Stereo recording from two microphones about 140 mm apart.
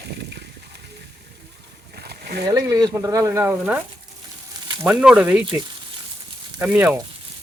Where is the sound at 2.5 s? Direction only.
25° right (ahead or behind).